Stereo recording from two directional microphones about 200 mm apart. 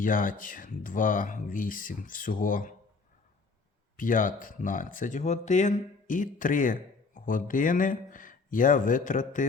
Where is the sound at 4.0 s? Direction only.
40° left (ahead or behind).